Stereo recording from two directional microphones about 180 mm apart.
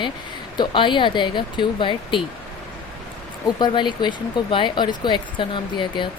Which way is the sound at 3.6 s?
25° left (ahead or behind).